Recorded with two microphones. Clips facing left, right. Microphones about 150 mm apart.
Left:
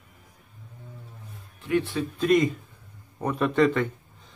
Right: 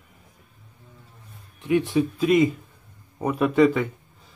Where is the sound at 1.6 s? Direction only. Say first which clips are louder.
Right 5 dB; 20° right (ahead or behind).